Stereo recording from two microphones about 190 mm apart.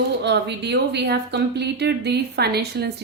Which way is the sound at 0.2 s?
65° right (ahead or behind).